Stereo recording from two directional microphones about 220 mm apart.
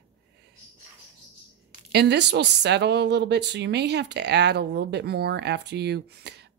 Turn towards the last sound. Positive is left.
turn(degrees=-50)  # may be behind; listen again after turning